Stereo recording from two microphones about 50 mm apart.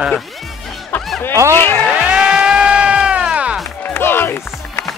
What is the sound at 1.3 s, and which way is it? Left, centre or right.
Speech, right.